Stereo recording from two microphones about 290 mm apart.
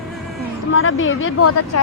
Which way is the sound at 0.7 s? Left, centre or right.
Left.